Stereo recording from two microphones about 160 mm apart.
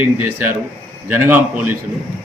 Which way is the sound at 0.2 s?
10° right (ahead or behind).